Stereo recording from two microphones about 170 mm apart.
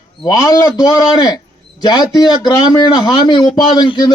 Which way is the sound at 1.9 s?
25° left (ahead or behind).